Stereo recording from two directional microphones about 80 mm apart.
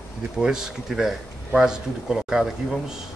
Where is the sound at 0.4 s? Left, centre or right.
Centre.